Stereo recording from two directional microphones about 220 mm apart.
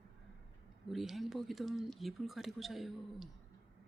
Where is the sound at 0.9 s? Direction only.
Centre (ahead or behind).